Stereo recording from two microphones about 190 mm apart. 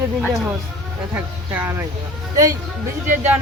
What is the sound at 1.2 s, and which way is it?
Speech, 10° right (ahead or behind).